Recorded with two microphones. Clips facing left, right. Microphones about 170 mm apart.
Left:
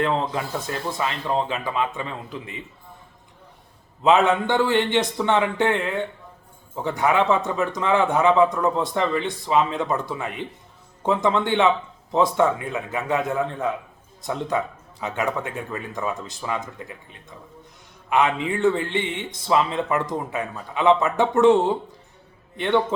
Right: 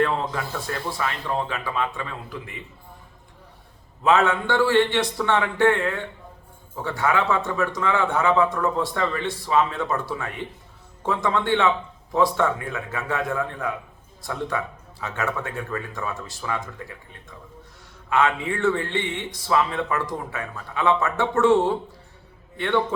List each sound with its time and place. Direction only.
0.0 s a man's voice: 20° left (ahead or behind)
4.0 s a man's voice: 20° left (ahead or behind)
22.5 s a man's voice: 20° left (ahead or behind)